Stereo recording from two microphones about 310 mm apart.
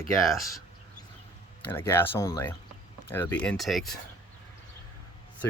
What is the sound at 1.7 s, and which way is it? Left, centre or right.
Speech, centre.